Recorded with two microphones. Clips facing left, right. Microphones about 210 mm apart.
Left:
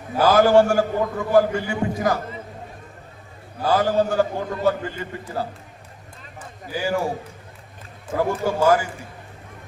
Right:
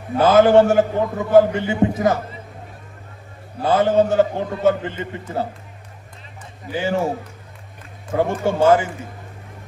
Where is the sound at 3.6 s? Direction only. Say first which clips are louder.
Right 3 dB; 25° right (ahead or behind).